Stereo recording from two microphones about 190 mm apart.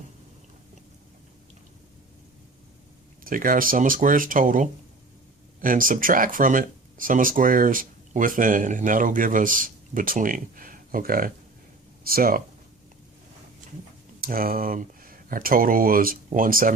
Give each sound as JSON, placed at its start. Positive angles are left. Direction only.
{"t": 3.2, "sound": "speech", "side_deg": -45}
{"t": 14.2, "sound": "speech", "side_deg": -50}